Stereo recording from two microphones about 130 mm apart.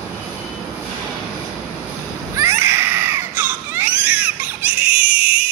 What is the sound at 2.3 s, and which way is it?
Baby cry, 20° right (ahead or behind).